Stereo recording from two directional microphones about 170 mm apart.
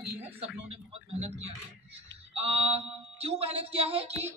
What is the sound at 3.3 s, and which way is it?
Speech, 35° right (ahead or behind).